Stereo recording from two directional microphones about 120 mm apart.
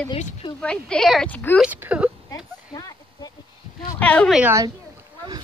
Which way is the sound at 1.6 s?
15° right (ahead or behind).